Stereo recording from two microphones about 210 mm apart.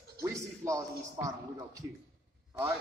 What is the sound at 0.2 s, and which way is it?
A man's voice, 15° right (ahead or behind).